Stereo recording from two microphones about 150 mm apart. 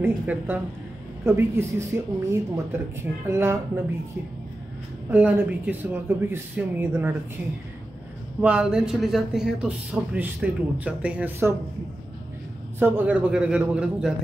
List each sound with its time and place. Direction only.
0.0 s speech: 10° right (ahead or behind)
5.1 s speech: 10° right (ahead or behind)
8.4 s speech: 5° right (ahead or behind)
12.7 s speech: 15° right (ahead or behind)